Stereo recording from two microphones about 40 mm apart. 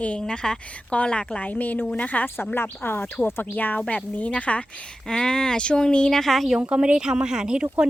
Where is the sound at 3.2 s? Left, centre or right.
Left.